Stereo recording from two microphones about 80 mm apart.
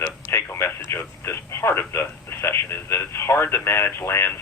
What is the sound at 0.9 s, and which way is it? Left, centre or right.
Speech, left.